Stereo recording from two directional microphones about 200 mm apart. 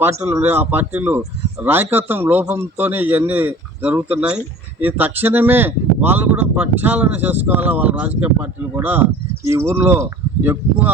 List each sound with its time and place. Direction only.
0.0 s speech: 10° right (ahead or behind)